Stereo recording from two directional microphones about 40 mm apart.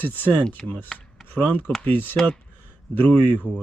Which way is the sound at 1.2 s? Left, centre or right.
Left.